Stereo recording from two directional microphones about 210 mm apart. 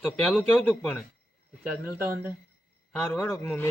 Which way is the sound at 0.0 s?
5° left (ahead or behind).